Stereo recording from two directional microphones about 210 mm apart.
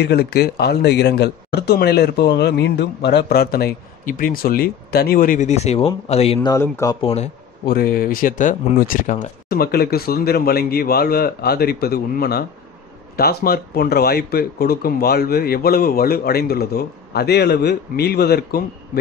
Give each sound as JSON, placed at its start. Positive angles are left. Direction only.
{"t": 0.0, "sound": "speech", "side_deg": 50}
{"t": 6.5, "sound": "speech", "side_deg": 15}
{"t": 7.0, "sound": "speech", "side_deg": 30}
{"t": 7.6, "sound": "speech", "side_deg": 45}